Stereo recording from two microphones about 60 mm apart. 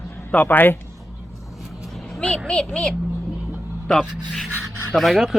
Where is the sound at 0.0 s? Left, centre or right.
Left.